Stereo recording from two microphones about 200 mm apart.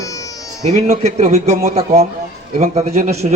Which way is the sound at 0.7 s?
35° right (ahead or behind).